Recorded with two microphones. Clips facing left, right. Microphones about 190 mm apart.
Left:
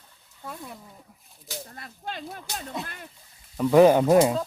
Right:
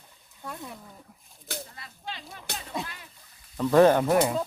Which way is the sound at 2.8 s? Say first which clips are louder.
Left 2 dB; 50° left (ahead or behind).